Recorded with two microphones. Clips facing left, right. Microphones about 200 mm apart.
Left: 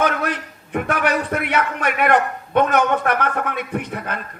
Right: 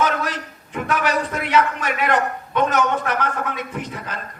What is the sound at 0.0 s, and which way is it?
A man's voice, 60° left (ahead or behind).